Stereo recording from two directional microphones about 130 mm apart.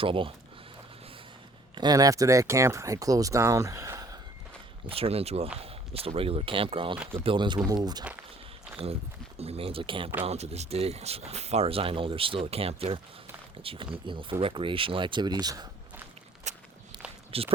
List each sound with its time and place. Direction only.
0.0 s speech: 45° right (ahead or behind)
1.7 s speech: 30° right (ahead or behind)
4.9 s speech: 50° right (ahead or behind); by 8.0 s 30° right (ahead or behind)
9.4 s speech: 50° right (ahead or behind)
10.2 s speech: 55° right (ahead or behind); by 15.7 s 30° right (ahead or behind)
16.5 s walk: 65° right (ahead or behind)
17.3 s speech: 45° right (ahead or behind)